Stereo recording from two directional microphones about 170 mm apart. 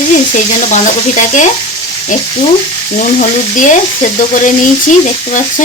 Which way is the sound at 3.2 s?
50° left (ahead or behind).